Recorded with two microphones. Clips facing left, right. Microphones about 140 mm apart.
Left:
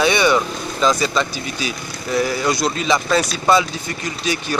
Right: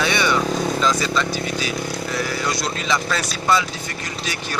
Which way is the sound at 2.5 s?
20° left (ahead or behind).